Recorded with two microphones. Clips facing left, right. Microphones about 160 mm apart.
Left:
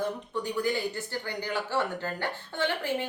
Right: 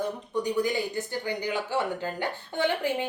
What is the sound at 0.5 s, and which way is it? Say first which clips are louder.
A woman's voice: even; 15° right (ahead or behind).